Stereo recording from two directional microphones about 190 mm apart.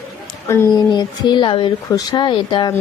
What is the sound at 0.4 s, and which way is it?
Speech, 15° left (ahead or behind).